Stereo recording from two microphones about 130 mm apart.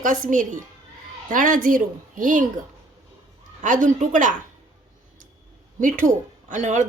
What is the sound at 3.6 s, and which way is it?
Speech, 80° right.